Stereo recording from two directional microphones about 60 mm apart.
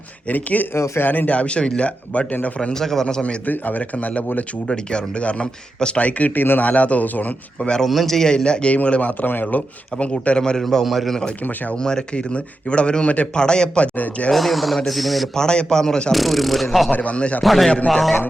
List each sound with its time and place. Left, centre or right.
0.3 s speech: left
0.7 s speech: left
1.0 s speech: left
2.6 s a man's voice: centre
3.4 s speech: left
4.7 s speech: centre
7.9 s a man's voice: centre
11.4 s speech: left
11.8 s a man's voice: centre
14.3 s speech: centre
15.4 s a man's voice: centre
16.1 s speech: centre
16.9 s speech: left
17.4 s speech: centre